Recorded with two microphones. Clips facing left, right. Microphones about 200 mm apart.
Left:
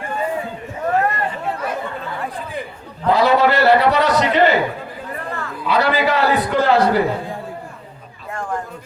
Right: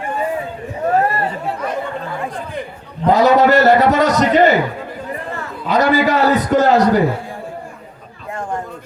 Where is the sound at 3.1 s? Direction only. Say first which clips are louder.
Right 3 dB; 45° right (ahead or behind).